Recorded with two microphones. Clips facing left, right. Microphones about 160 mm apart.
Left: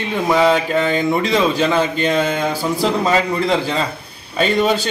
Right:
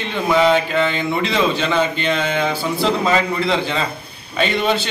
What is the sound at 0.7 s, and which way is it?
A man's voice, 40° left (ahead or behind).